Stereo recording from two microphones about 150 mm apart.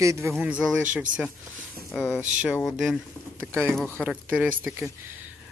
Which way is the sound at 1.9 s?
15° left (ahead or behind).